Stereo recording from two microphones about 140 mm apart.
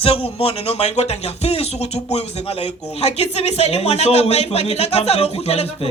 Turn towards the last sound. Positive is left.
turn(degrees=45)  # may be behind; listen again after turning